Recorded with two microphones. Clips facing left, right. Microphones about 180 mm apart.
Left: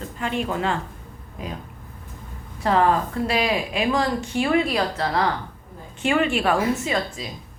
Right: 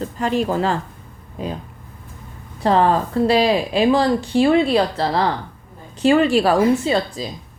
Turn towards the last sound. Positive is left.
turn(degrees=-35)  # may be behind; listen again after turning